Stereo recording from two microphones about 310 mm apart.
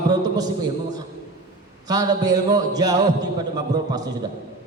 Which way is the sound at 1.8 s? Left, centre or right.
Centre.